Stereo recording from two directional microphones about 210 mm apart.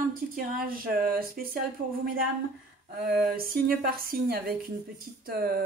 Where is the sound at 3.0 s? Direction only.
45° right (ahead or behind).